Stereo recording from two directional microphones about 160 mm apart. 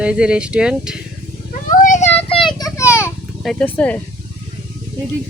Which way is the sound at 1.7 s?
55° left (ahead or behind).